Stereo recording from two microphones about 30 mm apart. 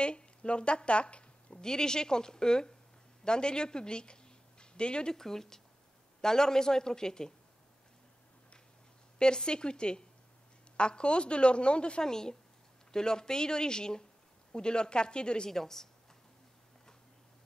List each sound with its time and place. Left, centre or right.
0.0 s a woman's voice: left
1.6 s a woman's voice: left
5.1 s a woman's voice: centre
9.2 s a woman's voice: left
12.0 s a woman's voice: left
15.5 s speech: centre